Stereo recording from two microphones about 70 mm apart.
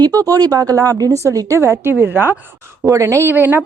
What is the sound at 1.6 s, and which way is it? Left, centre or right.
Speech, right.